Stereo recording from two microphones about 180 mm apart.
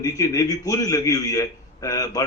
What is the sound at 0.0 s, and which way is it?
A man's voice, 20° left (ahead or behind).